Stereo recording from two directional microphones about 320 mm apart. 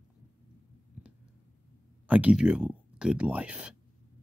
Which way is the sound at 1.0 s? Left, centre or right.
Centre.